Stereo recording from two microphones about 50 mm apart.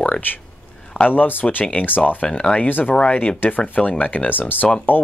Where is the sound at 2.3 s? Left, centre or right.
Centre.